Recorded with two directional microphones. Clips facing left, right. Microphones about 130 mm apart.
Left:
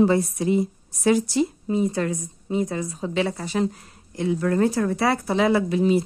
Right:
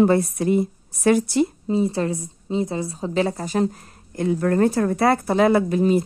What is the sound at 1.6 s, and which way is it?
A woman's voice, 30° right (ahead or behind).